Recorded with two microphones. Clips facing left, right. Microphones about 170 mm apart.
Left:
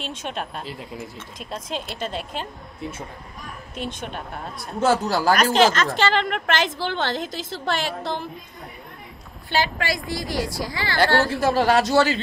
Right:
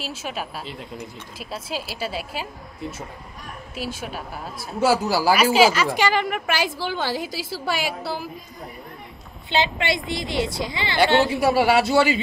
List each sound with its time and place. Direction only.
0.0 s a woman's voice: 5° right (ahead or behind)
9.5 s a woman's voice: 20° right (ahead or behind)
11.2 s a woman's voice: 5° right (ahead or behind)